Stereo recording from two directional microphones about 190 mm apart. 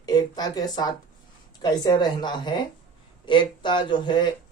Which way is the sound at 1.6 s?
20° left (ahead or behind).